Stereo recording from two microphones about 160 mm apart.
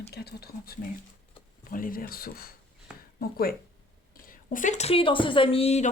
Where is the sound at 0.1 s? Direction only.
85° left.